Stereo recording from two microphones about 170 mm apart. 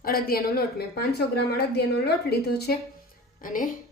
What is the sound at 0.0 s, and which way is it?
A woman's voice, 60° left (ahead or behind).